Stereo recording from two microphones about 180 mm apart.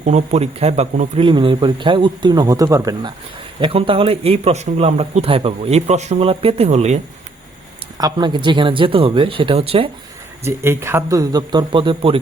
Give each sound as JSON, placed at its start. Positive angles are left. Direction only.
{"t": 0.0, "sound": "a man's voice", "side_deg": -40}
{"t": 1.3, "sound": "speech", "side_deg": -25}
{"t": 3.6, "sound": "a man's voice", "side_deg": -30}
{"t": 7.9, "sound": "speech", "side_deg": -20}
{"t": 10.4, "sound": "speech", "side_deg": -15}